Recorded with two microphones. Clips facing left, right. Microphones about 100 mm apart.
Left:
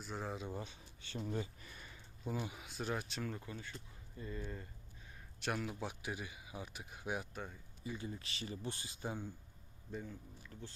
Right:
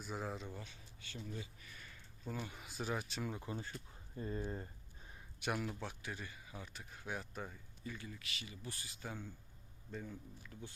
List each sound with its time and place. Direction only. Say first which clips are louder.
0.0 s speech: even; centre (ahead or behind)
0.4 s speech: left 5 dB; 20° left (ahead or behind)
1.6 s a sound: left 2 dB; 25° left (ahead or behind)
2.2 s speech: left 3 dB; 10° left (ahead or behind)
2.6 s speech: even; centre (ahead or behind)
3.4 s speech: right 3 dB; 30° right (ahead or behind)
5.4 s speech: even; 5° right (ahead or behind)
5.8 s speech: left 3 dB; 15° left (ahead or behind)
7.3 s speech: even; centre (ahead or behind)
7.9 s speech: left 4 dB; 20° left (ahead or behind)
8.1 s speech: left 5 dB; 35° left (ahead or behind); by 9.3 s 15° left (ahead or behind)
9.9 s speech: left 1 dB; 5° left (ahead or behind)